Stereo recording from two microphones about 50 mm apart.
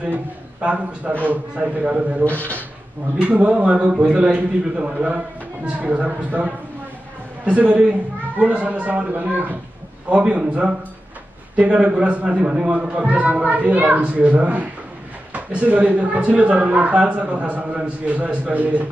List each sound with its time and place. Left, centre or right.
0.6 s speech: right
2.2 s speech: left
3.2 s a man's voice: right
10.0 s a man's voice: right